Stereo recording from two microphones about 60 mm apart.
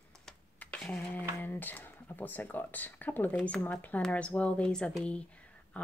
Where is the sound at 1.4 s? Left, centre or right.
Left.